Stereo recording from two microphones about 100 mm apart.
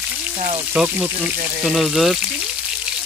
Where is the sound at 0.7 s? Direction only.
10° right (ahead or behind).